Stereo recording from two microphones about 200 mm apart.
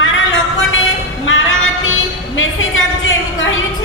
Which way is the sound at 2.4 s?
75° left (ahead or behind).